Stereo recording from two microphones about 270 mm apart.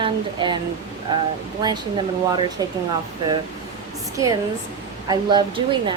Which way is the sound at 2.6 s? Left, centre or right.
Centre.